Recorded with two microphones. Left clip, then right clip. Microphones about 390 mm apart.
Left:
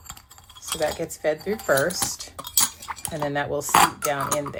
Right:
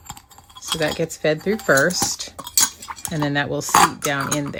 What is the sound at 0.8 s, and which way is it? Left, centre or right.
Speech, right.